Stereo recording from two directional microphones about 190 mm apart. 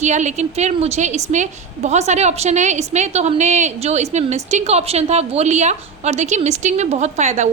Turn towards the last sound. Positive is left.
turn(degrees=-35)  # may be behind; listen again after turning